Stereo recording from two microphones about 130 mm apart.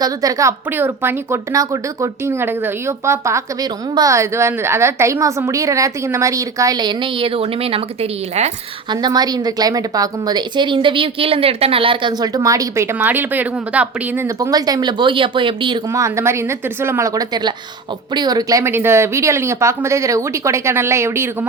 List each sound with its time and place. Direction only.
0.0 s speech: 25° right (ahead or behind); by 8.5 s 55° right (ahead or behind)
8.9 s a woman's voice: 30° right (ahead or behind); by 14.3 s 10° right (ahead or behind)
14.3 s a woman's voice: 25° right (ahead or behind)
15.9 s speech: 25° right (ahead or behind)